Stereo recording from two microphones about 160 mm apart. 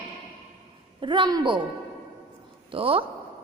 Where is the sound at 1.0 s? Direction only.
30° right (ahead or behind).